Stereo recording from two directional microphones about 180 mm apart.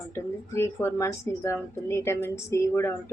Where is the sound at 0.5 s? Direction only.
15° left (ahead or behind).